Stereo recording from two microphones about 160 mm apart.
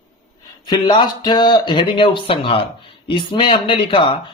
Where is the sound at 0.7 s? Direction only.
25° left (ahead or behind).